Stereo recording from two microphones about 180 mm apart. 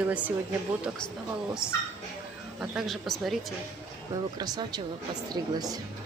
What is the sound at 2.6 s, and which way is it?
Speech, centre (ahead or behind).